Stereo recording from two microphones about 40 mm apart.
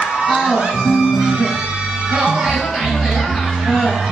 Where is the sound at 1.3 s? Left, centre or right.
Centre.